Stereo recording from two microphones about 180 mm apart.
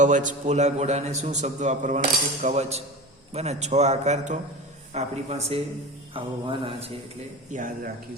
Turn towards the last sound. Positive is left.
turn(degrees=-45)  # may be behind; listen again after turning